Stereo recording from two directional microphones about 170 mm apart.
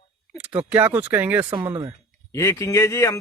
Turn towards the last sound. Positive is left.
turn(degrees=15)  # may be behind; listen again after turning